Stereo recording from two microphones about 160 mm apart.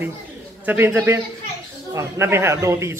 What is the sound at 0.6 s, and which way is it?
Speech, 15° right (ahead or behind).